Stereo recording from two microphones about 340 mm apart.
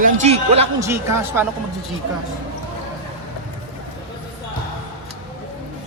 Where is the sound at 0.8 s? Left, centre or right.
Centre.